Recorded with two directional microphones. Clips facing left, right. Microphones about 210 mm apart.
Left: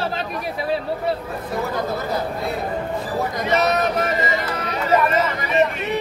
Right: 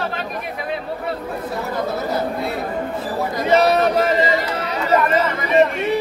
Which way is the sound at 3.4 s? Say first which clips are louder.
Right 6 dB; 30° right (ahead or behind).